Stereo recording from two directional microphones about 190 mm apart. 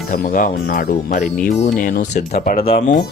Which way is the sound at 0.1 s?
50° left (ahead or behind).